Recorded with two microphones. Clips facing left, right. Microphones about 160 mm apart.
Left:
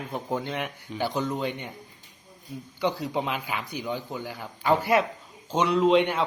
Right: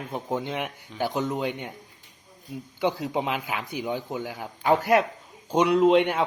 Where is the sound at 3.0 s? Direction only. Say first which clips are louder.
Right 1 dB; 15° right (ahead or behind).